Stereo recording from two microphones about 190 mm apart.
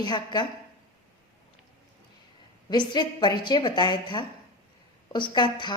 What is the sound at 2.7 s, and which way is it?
A woman's voice, 20° left (ahead or behind).